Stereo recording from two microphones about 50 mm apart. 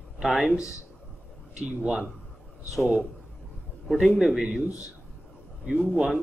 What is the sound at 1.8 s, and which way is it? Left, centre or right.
Speech, right.